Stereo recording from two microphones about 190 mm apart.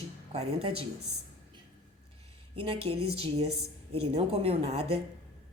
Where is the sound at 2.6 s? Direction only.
30° right (ahead or behind).